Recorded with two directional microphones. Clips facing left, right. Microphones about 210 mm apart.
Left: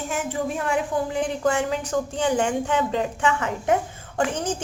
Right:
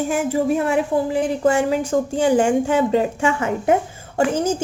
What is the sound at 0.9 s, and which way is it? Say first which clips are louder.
A woman's voice: right 5 dB; 25° right (ahead or behind).